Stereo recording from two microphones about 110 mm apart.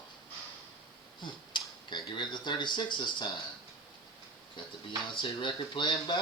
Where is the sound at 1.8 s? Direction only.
45° left (ahead or behind).